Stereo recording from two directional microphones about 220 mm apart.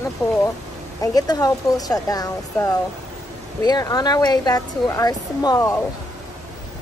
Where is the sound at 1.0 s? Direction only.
15° left (ahead or behind).